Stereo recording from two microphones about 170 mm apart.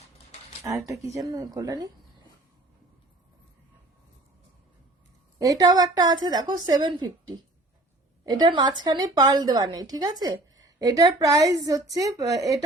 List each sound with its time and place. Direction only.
0.6 s a woman's voice: 20° right (ahead or behind)
5.4 s a woman's voice: 20° right (ahead or behind)